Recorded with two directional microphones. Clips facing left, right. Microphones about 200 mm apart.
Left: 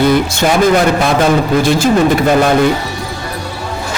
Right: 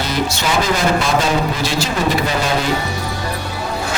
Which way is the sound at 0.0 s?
55° left (ahead or behind).